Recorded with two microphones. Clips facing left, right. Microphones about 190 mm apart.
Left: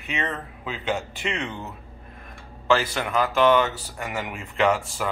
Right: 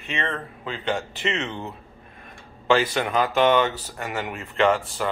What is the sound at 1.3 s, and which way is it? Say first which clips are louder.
Speech: right 2 dB; 25° right (ahead or behind).